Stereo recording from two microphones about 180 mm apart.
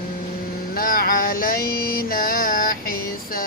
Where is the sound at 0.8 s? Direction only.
50° left (ahead or behind).